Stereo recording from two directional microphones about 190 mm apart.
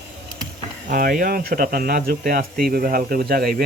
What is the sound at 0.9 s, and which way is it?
Speech, 45° right (ahead or behind).